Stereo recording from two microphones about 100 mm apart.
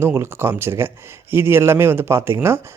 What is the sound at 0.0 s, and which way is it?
A man's voice, 25° right (ahead or behind).